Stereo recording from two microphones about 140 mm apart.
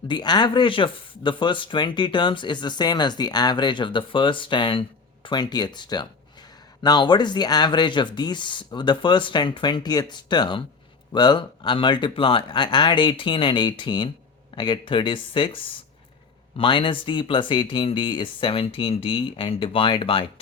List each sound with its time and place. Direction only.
0.1 s speech: 30° left (ahead or behind)